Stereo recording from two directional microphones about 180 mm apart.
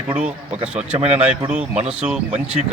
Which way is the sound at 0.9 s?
35° right (ahead or behind).